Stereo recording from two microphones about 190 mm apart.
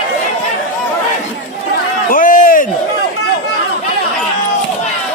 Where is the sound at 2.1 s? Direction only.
45° left (ahead or behind).